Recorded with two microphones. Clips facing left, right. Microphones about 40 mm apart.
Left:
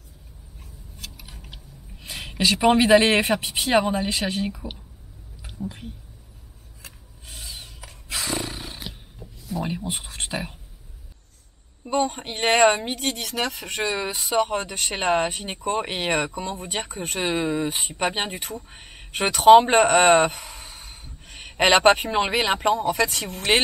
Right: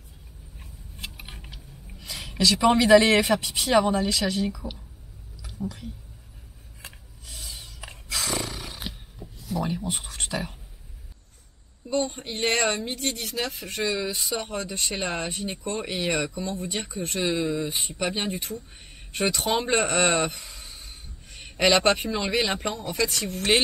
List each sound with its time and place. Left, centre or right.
0.6 s a sound: right
1.5 s speech: left
7.2 s mechanisms: left
8.1 s roar: left
9.5 s speech: left
11.8 s speech: left